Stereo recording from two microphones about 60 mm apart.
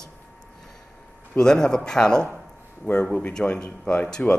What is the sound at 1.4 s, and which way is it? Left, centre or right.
A man's voice, centre.